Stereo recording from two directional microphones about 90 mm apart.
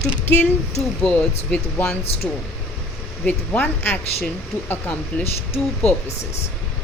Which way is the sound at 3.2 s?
20° left (ahead or behind).